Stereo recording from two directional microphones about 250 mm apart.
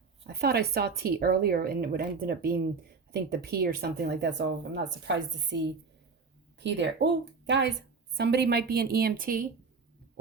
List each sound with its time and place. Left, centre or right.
0.3 s a woman's voice: right